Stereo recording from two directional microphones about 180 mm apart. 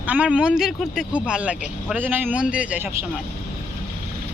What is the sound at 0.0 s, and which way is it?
A man's voice, 10° right (ahead or behind).